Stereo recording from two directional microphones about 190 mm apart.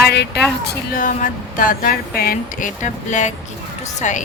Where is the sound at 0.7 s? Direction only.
45° left (ahead or behind).